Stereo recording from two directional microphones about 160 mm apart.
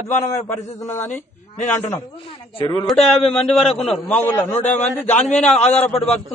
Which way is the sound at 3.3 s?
Centre (ahead or behind).